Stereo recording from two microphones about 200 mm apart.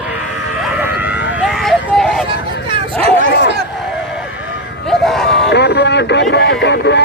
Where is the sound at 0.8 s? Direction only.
10° right (ahead or behind).